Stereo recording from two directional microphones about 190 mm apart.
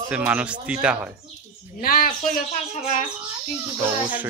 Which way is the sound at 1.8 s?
50° left (ahead or behind).